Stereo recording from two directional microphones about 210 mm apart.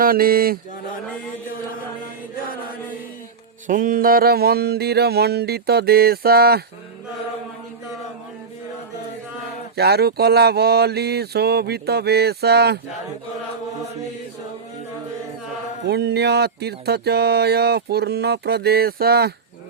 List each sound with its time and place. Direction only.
0.0 s speech: 45° right (ahead or behind)
3.7 s speech: 40° right (ahead or behind)
9.7 s speech: 50° right (ahead or behind)
15.9 s speech: 50° right (ahead or behind)